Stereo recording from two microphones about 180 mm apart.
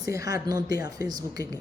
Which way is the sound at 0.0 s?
20° right (ahead or behind).